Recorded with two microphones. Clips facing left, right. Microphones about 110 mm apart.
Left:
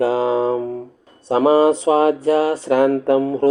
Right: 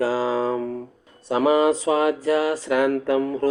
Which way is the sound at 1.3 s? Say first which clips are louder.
Left 5 dB; 30° left (ahead or behind).